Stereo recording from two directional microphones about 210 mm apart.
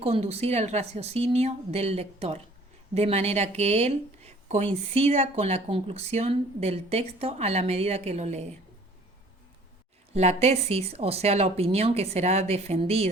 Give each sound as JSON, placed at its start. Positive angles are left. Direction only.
{"t": 0.0, "sound": "speech", "side_deg": -30}
{"t": 10.2, "sound": "speech", "side_deg": -30}